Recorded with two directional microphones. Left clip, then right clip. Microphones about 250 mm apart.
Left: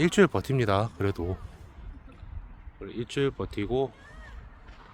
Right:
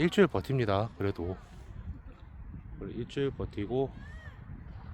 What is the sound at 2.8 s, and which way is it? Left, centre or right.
Speech, centre.